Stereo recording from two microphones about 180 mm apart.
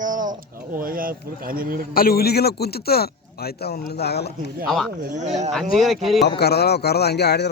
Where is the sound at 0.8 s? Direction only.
50° right (ahead or behind).